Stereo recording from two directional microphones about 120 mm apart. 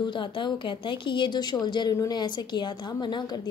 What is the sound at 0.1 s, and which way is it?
A woman's voice, 40° left (ahead or behind).